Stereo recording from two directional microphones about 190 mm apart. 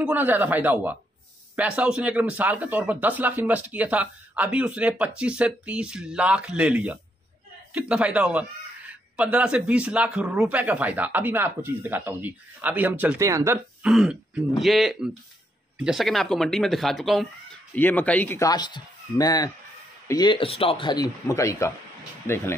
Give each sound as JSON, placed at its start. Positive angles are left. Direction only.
{"t": 0.0, "sound": "speech", "side_deg": -10}
{"t": 13.8, "sound": "speech", "side_deg": -5}